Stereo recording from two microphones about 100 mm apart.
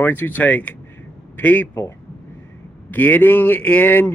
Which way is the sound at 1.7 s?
30° left (ahead or behind).